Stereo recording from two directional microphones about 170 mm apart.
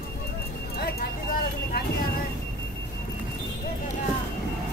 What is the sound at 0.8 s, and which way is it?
Clip-clop, 65° left (ahead or behind).